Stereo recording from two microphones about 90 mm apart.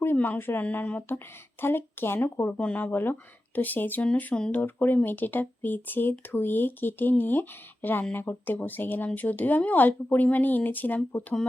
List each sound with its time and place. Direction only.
0.0 s speech: 25° left (ahead or behind)